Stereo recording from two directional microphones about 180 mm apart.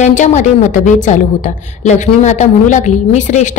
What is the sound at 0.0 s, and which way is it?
A woman's voice, 40° left (ahead or behind).